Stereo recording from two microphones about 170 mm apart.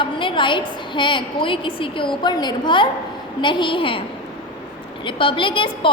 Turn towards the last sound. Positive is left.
turn(degrees=30)  # may be behind; listen again after turning